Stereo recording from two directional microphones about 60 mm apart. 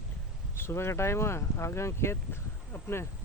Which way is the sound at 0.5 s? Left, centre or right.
Left.